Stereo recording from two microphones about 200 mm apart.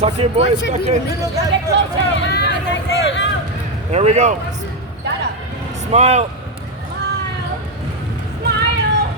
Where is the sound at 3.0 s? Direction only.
65° left (ahead or behind).